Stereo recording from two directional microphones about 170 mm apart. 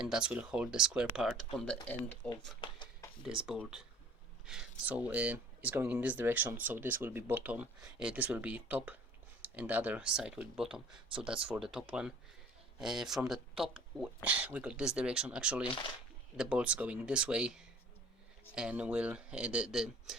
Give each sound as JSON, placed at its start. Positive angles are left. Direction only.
{"t": 0.0, "sound": "speech", "side_deg": -5}
{"t": 2.6, "sound": "speech", "side_deg": 30}
{"t": 3.2, "sound": "speech", "side_deg": -5}